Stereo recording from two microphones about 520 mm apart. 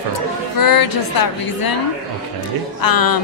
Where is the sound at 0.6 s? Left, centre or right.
Left.